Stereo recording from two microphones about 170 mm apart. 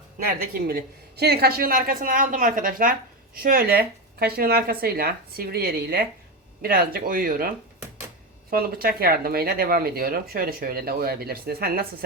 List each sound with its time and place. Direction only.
0.5 s speech: 60° right (ahead or behind)